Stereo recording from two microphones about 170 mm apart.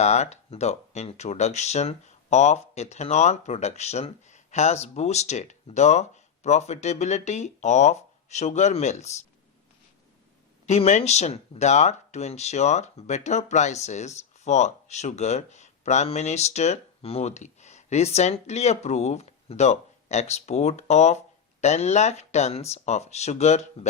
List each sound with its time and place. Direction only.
0.0 s speech: 40° left (ahead or behind)
10.7 s speech: 40° left (ahead or behind)